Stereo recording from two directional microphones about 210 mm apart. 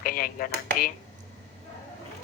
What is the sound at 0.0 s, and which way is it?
Speech, 45° left (ahead or behind).